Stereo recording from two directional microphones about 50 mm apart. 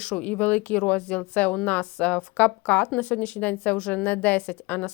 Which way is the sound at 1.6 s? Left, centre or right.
Left.